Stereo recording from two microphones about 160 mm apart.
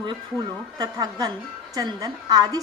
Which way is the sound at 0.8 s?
25° right (ahead or behind).